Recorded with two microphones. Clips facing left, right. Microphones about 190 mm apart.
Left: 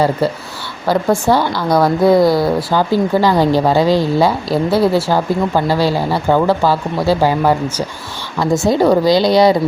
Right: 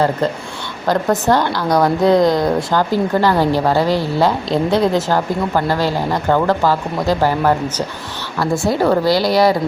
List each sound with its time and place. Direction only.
0.2 s a woman's voice: 10° left (ahead or behind)